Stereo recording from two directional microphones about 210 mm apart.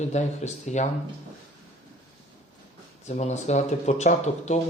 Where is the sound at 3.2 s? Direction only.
35° left (ahead or behind).